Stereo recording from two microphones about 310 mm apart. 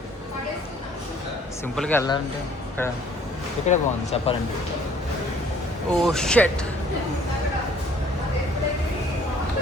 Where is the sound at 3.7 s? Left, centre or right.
Left.